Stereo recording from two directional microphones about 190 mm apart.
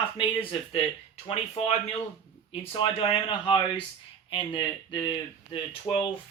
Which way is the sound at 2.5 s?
30° left (ahead or behind).